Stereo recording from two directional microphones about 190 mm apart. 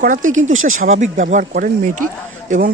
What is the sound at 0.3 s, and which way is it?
Speech, 90° right.